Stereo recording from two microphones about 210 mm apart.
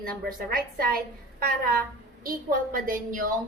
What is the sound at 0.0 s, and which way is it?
A woman's voice, 45° right (ahead or behind).